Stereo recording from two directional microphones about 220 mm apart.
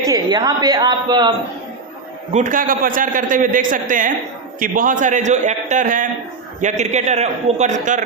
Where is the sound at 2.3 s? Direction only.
35° right (ahead or behind).